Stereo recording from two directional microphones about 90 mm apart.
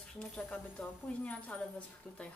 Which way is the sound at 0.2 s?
10° left (ahead or behind).